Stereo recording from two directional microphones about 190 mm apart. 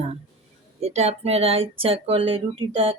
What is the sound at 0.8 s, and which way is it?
Speech, 35° right (ahead or behind).